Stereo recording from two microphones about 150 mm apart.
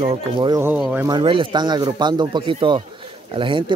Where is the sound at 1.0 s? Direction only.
30° right (ahead or behind).